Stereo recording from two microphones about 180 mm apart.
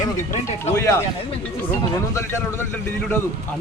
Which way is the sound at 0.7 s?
15° left (ahead or behind).